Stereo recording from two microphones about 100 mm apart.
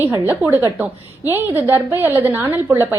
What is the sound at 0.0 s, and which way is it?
A woman's voice, 20° right (ahead or behind).